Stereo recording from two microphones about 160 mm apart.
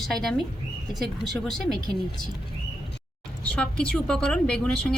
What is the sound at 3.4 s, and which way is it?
A woman's voice, 5° left (ahead or behind).